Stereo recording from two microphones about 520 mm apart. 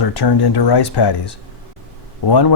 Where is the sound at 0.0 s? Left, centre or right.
Left.